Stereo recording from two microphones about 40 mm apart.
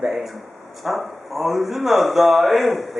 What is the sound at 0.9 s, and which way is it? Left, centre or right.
Speech, centre.